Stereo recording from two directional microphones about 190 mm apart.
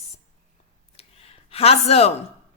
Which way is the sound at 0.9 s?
30° left (ahead or behind).